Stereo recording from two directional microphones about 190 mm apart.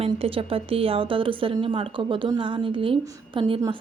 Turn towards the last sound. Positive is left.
turn(degrees=-30)  # may be behind; listen again after turning